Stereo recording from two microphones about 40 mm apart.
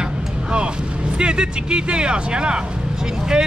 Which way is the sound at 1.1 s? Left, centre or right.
Right.